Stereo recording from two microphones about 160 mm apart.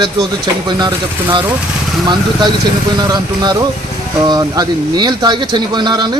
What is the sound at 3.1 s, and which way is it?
A man's voice, 25° right (ahead or behind).